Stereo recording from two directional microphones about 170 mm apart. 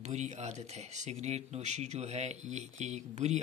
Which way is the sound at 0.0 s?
45° right (ahead or behind).